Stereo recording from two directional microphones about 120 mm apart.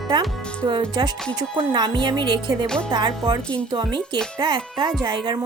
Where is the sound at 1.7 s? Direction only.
40° right (ahead or behind).